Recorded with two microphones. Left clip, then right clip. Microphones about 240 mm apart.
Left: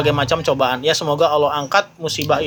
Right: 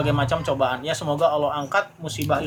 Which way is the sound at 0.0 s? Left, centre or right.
Left.